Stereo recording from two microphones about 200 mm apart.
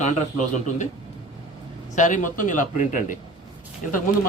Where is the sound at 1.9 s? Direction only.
40° left (ahead or behind).